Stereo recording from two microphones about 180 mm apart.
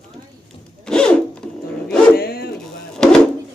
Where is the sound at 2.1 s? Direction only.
60° left (ahead or behind).